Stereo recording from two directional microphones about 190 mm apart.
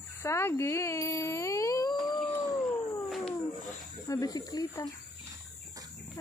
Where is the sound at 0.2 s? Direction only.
15° left (ahead or behind).